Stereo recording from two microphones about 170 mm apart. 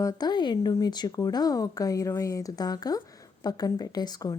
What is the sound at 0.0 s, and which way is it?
Speech, 20° left (ahead or behind).